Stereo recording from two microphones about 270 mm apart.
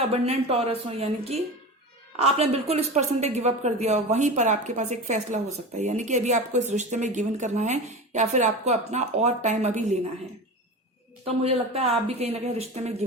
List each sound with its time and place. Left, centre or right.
0.0 s speech: right
11.3 s speech: right